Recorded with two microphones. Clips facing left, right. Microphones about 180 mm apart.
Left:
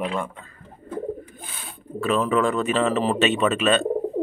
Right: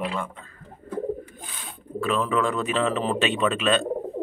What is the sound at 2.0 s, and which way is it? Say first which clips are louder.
Speech: left 3 dB; centre (ahead or behind).